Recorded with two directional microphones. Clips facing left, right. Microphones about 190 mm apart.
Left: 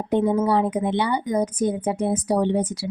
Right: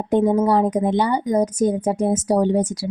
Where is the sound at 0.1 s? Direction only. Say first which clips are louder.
Right 3 dB; 45° right (ahead or behind).